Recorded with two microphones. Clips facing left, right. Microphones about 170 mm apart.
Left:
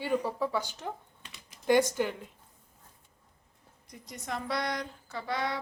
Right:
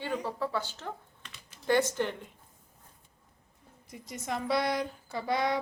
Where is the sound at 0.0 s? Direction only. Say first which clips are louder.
Left 3 dB; 10° left (ahead or behind).